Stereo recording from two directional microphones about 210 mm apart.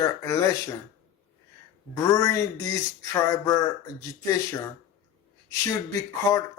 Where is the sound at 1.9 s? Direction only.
15° left (ahead or behind).